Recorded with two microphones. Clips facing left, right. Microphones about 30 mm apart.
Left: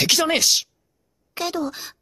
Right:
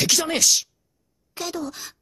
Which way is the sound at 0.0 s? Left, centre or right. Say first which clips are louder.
Left 2 dB; left.